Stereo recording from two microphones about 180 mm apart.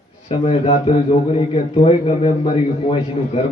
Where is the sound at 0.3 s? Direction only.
35° left (ahead or behind).